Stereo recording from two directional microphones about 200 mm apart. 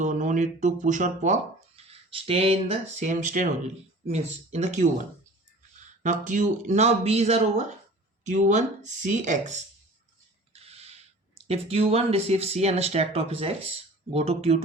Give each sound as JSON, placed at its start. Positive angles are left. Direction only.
{"t": 0.0, "sound": "speech", "side_deg": -35}
{"t": 6.0, "sound": "speech", "side_deg": -40}